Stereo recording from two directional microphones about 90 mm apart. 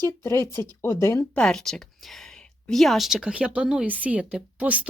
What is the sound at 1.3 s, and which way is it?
Speech, 5° left (ahead or behind).